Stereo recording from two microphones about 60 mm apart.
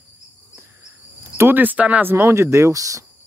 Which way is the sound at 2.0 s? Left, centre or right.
Right.